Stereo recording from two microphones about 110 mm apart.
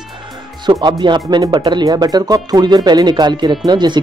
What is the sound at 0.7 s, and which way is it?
Speech, 40° right (ahead or behind).